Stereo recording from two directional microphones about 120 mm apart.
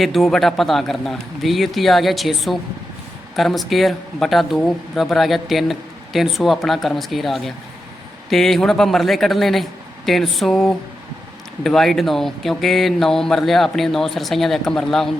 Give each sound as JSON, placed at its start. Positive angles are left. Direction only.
{"t": 0.0, "sound": "speech", "side_deg": 0}